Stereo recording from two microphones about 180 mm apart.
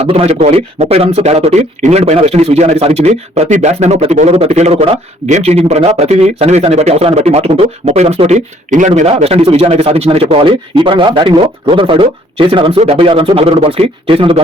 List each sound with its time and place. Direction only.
0.0 s a man's voice: 35° right (ahead or behind)